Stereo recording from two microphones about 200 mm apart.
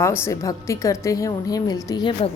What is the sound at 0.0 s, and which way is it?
A woman's voice, 15° left (ahead or behind).